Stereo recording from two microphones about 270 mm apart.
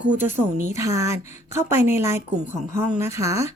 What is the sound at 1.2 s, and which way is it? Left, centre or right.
Speech, left.